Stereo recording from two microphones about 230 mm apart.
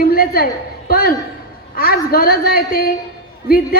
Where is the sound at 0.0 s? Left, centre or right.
Left.